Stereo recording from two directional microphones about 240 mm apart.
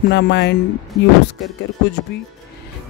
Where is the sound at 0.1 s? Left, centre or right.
Left.